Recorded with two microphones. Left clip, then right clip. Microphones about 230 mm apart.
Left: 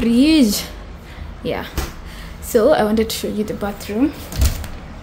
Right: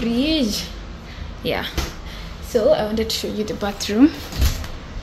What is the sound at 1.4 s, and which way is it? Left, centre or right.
Speech, centre.